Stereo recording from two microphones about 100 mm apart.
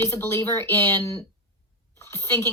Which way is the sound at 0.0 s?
25° left (ahead or behind).